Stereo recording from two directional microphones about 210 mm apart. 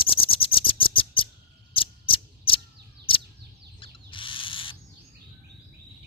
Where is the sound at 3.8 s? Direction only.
25° left (ahead or behind).